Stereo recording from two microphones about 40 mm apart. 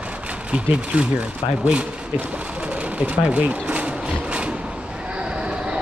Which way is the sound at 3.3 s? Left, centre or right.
Right.